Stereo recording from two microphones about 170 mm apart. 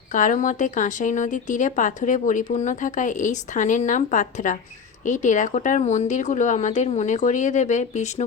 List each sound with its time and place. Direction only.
0.1 s speech: 50° left (ahead or behind)